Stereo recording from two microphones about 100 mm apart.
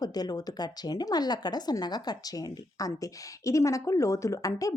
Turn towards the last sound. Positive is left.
turn(degrees=35)  # may be behind; listen again after turning